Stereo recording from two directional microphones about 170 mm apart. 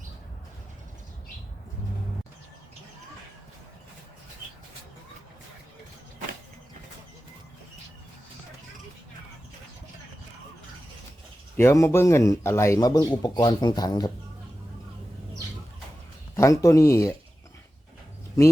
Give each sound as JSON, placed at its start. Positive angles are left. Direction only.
{"t": 11.5, "sound": "speech", "side_deg": 15}
{"t": 16.3, "sound": "speech", "side_deg": 20}